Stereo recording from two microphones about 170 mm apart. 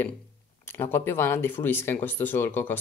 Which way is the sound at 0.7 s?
15° left (ahead or behind).